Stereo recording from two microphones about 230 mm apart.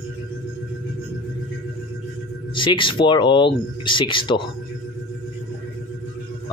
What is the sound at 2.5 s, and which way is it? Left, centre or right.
Speech, left.